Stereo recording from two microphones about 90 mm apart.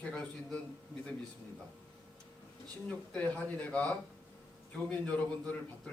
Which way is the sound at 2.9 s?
15° left (ahead or behind).